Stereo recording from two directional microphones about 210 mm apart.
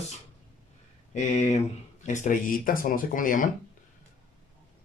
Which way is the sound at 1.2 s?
35° left (ahead or behind).